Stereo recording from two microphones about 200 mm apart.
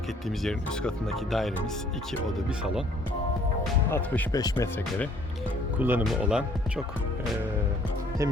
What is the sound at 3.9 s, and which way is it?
Speech, 15° left (ahead or behind).